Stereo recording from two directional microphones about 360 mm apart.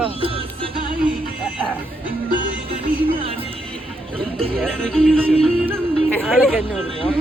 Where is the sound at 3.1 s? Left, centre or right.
Centre.